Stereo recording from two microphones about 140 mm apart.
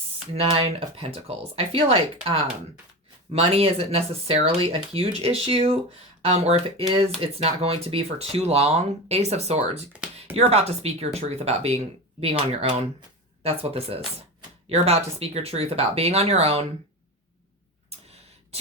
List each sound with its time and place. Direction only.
0.3 s speech: 45° right (ahead or behind)
3.3 s speech: 45° right (ahead or behind)
9.9 s a sound: 10° right (ahead or behind)
10.3 s speech: 50° right (ahead or behind)
17.8 s tick: 50° right (ahead or behind)